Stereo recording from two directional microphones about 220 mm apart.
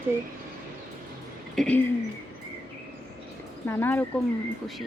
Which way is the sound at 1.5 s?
5° left (ahead or behind).